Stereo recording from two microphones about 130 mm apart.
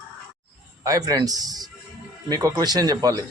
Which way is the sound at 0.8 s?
25° right (ahead or behind).